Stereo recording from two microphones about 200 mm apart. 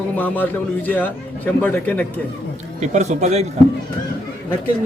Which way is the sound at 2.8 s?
35° right (ahead or behind).